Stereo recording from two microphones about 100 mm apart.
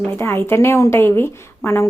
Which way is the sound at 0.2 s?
25° left (ahead or behind).